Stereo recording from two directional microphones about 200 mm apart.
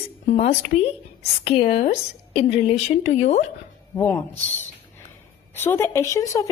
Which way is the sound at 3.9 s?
15° left (ahead or behind).